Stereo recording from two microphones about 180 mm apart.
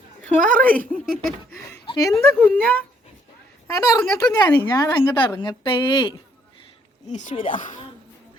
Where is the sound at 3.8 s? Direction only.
20° left (ahead or behind).